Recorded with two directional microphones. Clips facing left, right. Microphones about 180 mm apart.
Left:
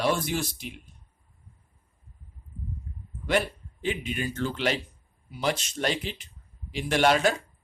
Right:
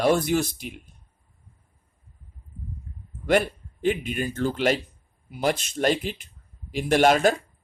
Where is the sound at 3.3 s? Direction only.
50° right (ahead or behind).